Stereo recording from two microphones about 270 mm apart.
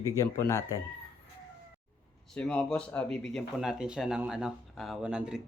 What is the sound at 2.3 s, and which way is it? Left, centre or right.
Speech, centre.